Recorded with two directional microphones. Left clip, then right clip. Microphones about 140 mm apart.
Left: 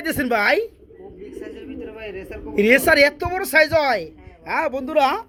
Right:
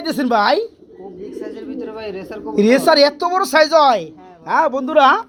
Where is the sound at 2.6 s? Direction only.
15° left (ahead or behind).